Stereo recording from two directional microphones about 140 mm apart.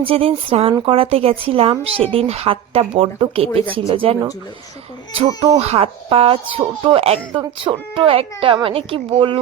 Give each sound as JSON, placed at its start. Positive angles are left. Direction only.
{"t": 0.0, "sound": "a woman's voice", "side_deg": -40}
{"t": 5.5, "sound": "speech", "side_deg": -45}